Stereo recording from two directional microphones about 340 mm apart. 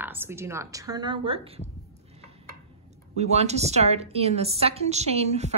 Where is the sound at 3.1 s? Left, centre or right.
Centre.